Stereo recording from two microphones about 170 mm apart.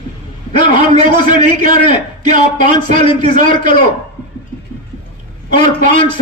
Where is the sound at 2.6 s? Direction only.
30° left (ahead or behind).